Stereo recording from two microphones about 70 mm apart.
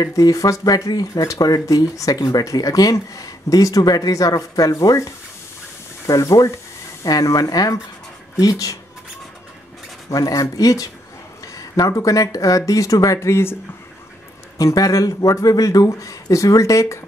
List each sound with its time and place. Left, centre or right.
0.0 s speech: left
4.1 s speech: left
7.1 s speech: left
10.0 s speech: left
14.6 s speech: left